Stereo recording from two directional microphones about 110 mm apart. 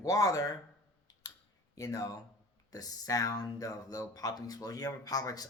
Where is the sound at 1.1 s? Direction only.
35° left (ahead or behind).